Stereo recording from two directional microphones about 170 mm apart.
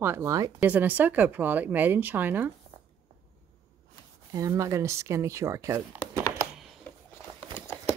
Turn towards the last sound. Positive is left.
turn(degrees=15)  # may be behind; listen again after turning